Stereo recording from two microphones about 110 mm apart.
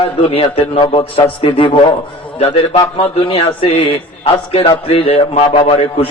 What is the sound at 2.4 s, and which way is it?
A man's voice, 65° left (ahead or behind).